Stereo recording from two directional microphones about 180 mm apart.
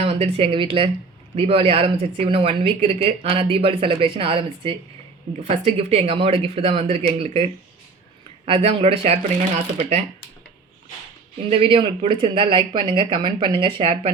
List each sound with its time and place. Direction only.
0.0 s speech: 35° right (ahead or behind)
11.4 s speech: 30° right (ahead or behind)